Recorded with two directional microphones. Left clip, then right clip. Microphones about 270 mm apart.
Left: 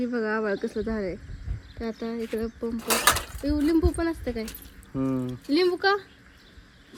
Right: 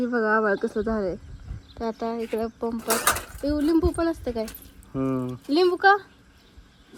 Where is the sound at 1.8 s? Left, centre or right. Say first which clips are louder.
Right 4 dB; centre.